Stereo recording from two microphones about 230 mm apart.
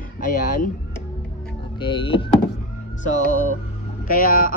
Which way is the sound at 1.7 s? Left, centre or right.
Left.